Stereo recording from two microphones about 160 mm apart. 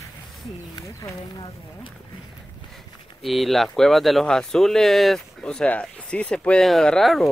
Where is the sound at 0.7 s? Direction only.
20° left (ahead or behind).